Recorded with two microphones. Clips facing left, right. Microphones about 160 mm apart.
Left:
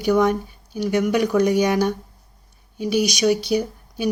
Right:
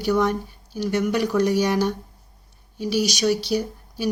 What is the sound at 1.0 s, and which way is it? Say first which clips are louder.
Speech: left 3 dB; centre (ahead or behind).